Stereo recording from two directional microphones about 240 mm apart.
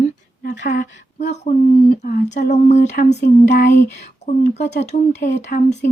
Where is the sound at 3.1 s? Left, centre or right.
Left.